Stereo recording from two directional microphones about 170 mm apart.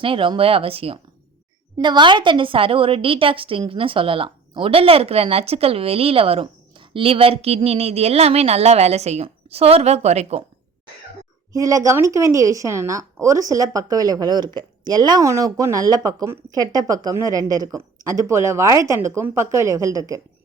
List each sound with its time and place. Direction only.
0.0 s a woman's voice: 30° right (ahead or behind)
11.5 s speech: 20° right (ahead or behind)